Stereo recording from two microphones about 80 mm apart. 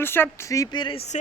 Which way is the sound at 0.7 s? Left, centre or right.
Left.